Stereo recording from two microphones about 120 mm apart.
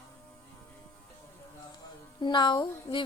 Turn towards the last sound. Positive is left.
turn(degrees=40)  # may be behind; listen again after turning